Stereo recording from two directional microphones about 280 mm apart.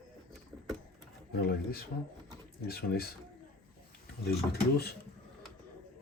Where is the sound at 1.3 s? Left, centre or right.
Left.